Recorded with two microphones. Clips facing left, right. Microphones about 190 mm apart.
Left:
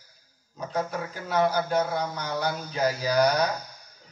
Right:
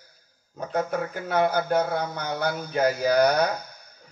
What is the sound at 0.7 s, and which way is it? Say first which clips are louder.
Speech: right 3 dB; 55° right (ahead or behind).